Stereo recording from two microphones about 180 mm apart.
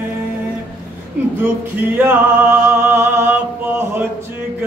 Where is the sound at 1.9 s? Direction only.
10° right (ahead or behind).